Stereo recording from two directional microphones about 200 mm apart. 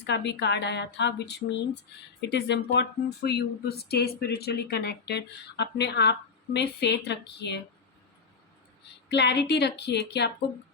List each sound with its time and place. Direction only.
0.0 s speech: 60° left (ahead or behind)
9.0 s speech: 60° left (ahead or behind)